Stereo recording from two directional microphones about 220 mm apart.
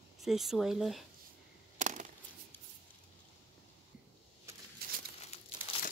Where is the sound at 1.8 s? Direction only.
35° right (ahead or behind).